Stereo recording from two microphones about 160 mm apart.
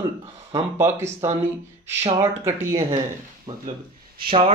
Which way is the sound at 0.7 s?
15° right (ahead or behind).